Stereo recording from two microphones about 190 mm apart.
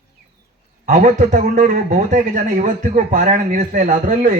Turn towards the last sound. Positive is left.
turn(degrees=-40)  # may be behind; listen again after turning